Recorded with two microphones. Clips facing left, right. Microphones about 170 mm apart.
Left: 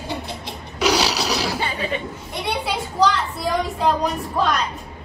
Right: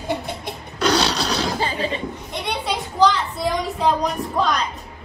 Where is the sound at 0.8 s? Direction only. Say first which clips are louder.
Even; 10° left (ahead or behind).